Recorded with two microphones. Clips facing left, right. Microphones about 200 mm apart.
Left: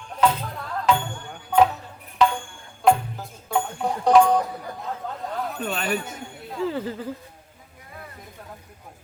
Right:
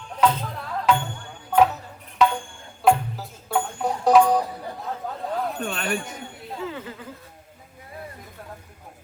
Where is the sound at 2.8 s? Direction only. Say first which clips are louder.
Even; centre (ahead or behind).